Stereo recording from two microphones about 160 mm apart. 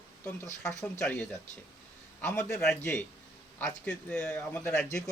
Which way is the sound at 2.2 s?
10° left (ahead or behind).